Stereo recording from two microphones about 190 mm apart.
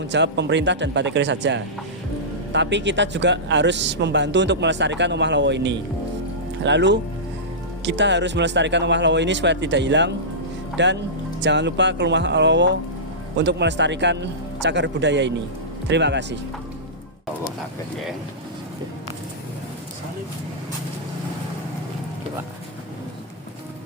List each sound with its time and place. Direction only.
0.0 s speech: 65° right (ahead or behind)